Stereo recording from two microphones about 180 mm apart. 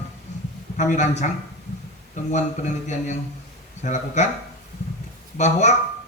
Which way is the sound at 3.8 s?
40° left (ahead or behind).